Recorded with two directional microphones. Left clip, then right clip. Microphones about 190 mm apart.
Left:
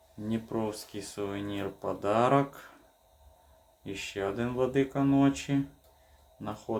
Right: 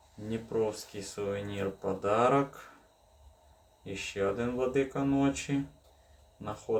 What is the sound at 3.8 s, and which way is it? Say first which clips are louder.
Speech: right 2 dB; 45° left (ahead or behind).